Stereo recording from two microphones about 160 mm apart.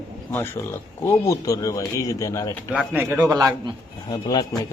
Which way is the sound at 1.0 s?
20° left (ahead or behind).